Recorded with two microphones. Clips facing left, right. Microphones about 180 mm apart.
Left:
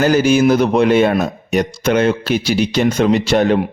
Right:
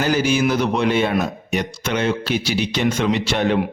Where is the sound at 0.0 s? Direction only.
45° left (ahead or behind).